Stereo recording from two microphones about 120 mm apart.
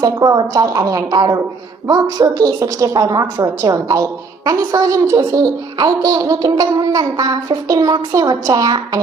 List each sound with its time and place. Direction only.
0.0 s speech: 35° right (ahead or behind)